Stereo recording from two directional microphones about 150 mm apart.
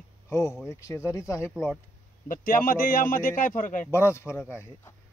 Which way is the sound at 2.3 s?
70° left (ahead or behind).